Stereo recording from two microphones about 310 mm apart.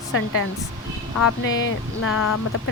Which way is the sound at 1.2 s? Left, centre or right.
Left.